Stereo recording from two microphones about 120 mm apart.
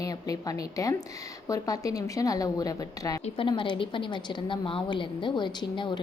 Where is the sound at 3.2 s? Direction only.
45° left (ahead or behind).